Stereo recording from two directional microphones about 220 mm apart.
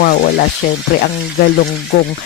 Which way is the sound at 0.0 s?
45° left (ahead or behind).